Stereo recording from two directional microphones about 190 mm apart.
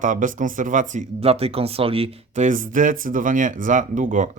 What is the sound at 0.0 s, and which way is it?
Speech, 45° right (ahead or behind).